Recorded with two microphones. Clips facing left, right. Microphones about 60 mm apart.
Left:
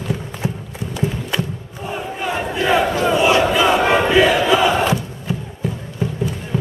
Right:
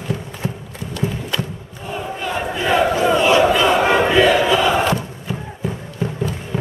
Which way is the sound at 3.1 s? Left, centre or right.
Centre.